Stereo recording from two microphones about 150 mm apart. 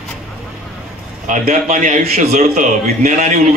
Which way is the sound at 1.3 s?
55° right (ahead or behind).